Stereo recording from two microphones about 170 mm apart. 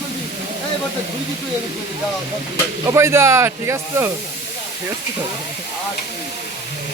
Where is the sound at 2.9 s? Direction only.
15° right (ahead or behind).